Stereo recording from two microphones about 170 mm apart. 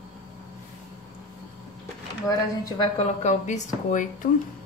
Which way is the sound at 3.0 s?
40° left (ahead or behind).